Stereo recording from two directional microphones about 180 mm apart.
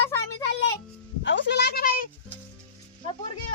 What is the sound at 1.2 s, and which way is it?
Speech, 80° left.